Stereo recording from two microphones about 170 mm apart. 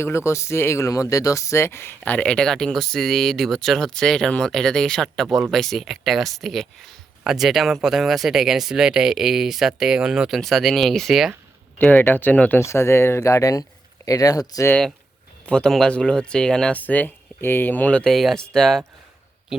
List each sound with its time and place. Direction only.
0.0 s speech: 15° left (ahead or behind); by 11.3 s centre (ahead or behind)
11.8 s speech: 10° left (ahead or behind)
15.4 s speech: 5° left (ahead or behind)